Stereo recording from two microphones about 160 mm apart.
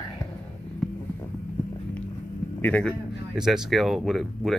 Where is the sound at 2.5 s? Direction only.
10° left (ahead or behind).